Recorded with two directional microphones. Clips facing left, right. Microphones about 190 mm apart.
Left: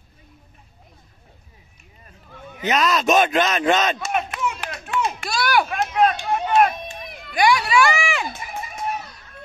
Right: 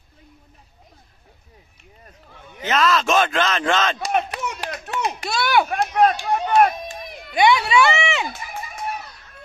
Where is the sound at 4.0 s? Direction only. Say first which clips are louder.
Right 1 dB; 35° right (ahead or behind).